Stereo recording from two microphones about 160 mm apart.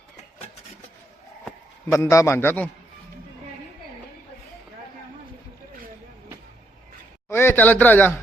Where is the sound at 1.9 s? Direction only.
20° left (ahead or behind).